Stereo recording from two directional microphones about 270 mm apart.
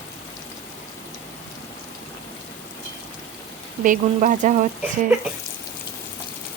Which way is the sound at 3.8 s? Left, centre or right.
Right.